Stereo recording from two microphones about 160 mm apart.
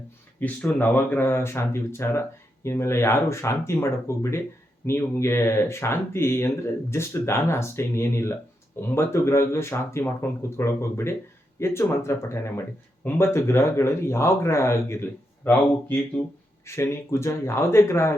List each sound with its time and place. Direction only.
0.3 s speech: 10° left (ahead or behind)